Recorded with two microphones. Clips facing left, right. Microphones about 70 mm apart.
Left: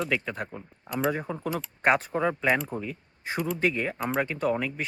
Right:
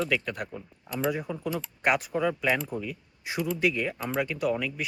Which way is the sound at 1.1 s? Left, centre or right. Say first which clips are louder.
Left 1 dB; left.